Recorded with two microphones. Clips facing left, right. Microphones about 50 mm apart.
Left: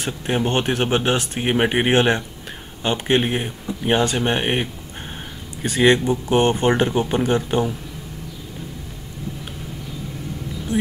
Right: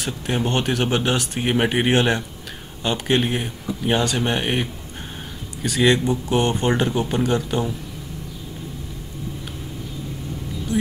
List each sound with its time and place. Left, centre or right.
0.0 s speech: centre